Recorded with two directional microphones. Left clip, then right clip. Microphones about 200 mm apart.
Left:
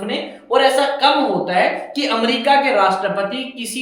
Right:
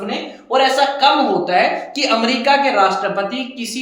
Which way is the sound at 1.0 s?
20° right (ahead or behind).